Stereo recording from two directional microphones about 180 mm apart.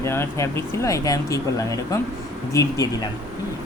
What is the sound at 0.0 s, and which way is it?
A woman's voice, 15° left (ahead or behind).